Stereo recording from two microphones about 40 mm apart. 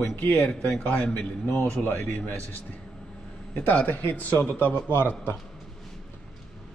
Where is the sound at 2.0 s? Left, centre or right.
Left.